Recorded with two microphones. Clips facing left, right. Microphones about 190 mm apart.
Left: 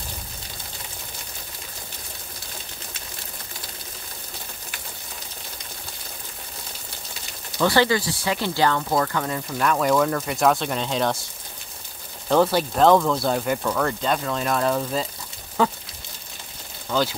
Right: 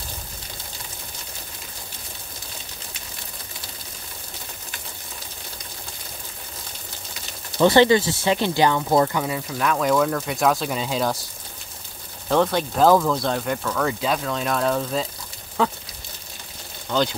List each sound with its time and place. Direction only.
7.5 s speech: 20° right (ahead or behind)
9.2 s speech: 5° right (ahead or behind)
12.3 s speech: centre (ahead or behind)
16.9 s speech: 5° left (ahead or behind)